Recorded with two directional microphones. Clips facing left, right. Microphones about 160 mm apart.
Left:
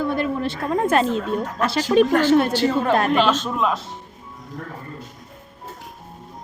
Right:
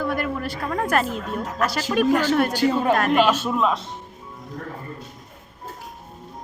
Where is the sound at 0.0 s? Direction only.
25° left (ahead or behind).